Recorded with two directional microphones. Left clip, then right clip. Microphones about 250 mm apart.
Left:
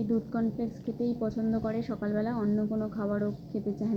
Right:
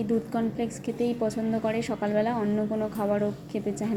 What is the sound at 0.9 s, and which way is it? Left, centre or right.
A woman's voice, right.